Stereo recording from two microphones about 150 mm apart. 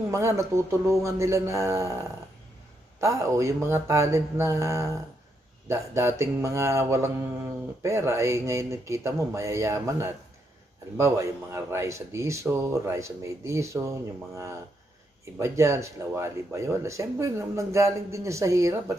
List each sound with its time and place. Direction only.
0.1 s speech: 20° right (ahead or behind)